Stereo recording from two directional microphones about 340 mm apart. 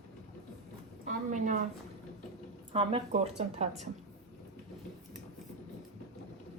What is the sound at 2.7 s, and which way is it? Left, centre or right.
Speech, centre.